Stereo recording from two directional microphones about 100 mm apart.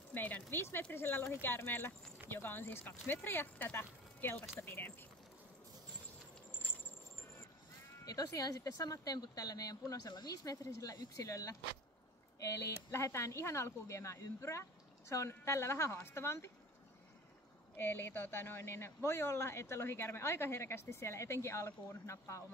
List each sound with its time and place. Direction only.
0.1 s speech: 20° left (ahead or behind)
8.0 s speech: 35° left (ahead or behind)
17.7 s speech: 20° left (ahead or behind)